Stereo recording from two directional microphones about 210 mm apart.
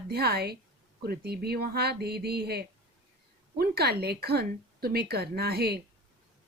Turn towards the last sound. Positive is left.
turn(degrees=-50)  # may be behind; listen again after turning